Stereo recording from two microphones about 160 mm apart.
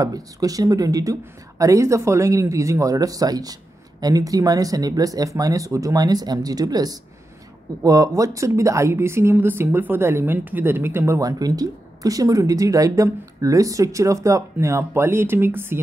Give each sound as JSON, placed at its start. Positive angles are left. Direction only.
{"t": 0.0, "sound": "a woman's voice", "side_deg": -20}